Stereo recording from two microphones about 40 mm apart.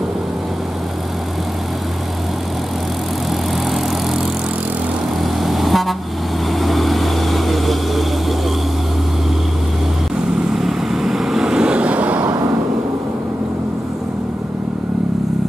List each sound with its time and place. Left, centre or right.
5.2 s vehicle: centre
10.5 s vehicle: centre
11.8 s vehicle: right